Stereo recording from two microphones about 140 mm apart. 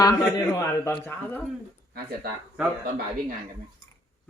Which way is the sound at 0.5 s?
20° left (ahead or behind).